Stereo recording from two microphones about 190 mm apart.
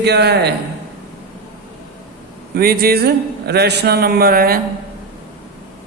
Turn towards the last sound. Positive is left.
turn(degrees=-50)  # may be behind; listen again after turning